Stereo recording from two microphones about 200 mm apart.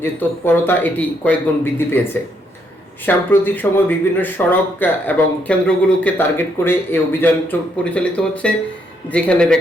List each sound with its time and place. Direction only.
0.0 s speech: 10° left (ahead or behind)
3.1 s speech: 10° left (ahead or behind)